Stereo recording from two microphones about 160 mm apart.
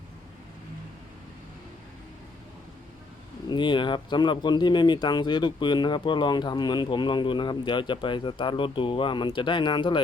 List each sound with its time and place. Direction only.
3.5 s speech: 30° left (ahead or behind)